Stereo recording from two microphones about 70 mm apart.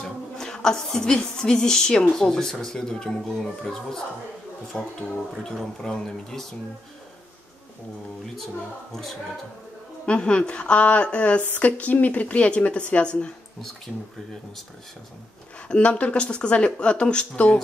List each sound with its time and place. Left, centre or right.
0.0 s music: centre
10.0 s music: centre
15.7 s music: centre